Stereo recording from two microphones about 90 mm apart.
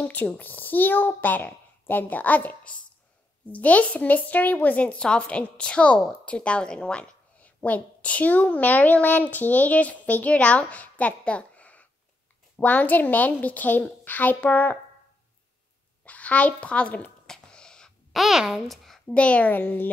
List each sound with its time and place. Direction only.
0.0 s a child's voice: 15° left (ahead or behind)
16.0 s a child's voice: 15° left (ahead or behind)
17.3 s a sound: 10° left (ahead or behind)
19.0 s speech: 15° left (ahead or behind)